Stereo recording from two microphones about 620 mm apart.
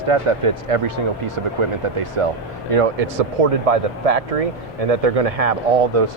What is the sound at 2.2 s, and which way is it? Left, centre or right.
Speech, right.